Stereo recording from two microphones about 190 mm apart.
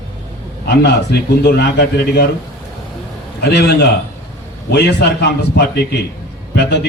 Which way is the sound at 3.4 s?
60° left (ahead or behind).